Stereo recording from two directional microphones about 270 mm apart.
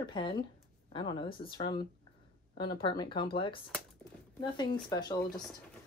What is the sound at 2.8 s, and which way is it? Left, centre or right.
Speech, centre.